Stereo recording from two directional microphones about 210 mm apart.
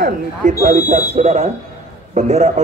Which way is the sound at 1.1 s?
30° right (ahead or behind).